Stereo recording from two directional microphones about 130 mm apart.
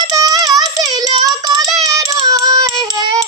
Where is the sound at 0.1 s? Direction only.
30° right (ahead or behind).